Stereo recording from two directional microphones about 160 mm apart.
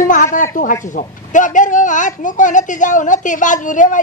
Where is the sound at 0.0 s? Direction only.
55° left (ahead or behind).